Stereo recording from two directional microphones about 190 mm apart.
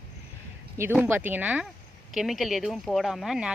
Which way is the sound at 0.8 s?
10° right (ahead or behind).